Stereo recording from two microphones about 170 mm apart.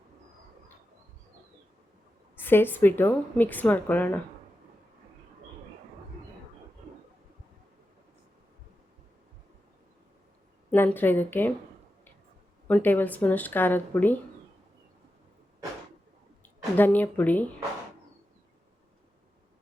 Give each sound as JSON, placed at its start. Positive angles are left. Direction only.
{"t": 2.3, "sound": "speech", "side_deg": 10}
{"t": 10.7, "sound": "speech", "side_deg": 10}
{"t": 12.6, "sound": "speech", "side_deg": 10}
{"t": 16.7, "sound": "speech", "side_deg": 10}